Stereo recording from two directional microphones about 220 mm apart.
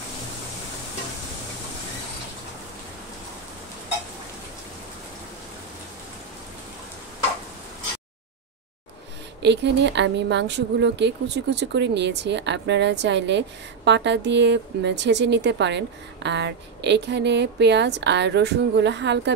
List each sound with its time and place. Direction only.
9.4 s speech: 50° right (ahead or behind)